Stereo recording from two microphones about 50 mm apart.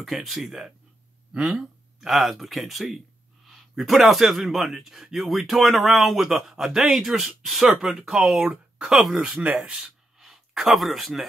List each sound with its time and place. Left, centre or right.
0.0 s speech: centre
1.3 s speech: right
1.6 s speech: centre; by 8.5 s right
8.9 s speech: centre
9.3 s speech: right
9.7 s a sound: centre
10.2 s speech: centre